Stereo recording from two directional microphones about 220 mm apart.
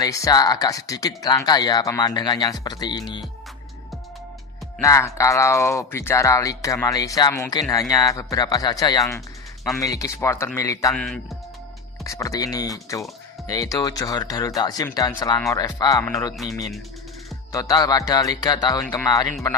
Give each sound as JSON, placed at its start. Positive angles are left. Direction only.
{"t": 0.0, "sound": "speech", "side_deg": 15}
{"t": 4.8, "sound": "speech", "side_deg": 15}
{"t": 10.9, "sound": "speech", "side_deg": 0}
{"t": 12.0, "sound": "speech", "side_deg": 15}
{"t": 17.5, "sound": "speech", "side_deg": 15}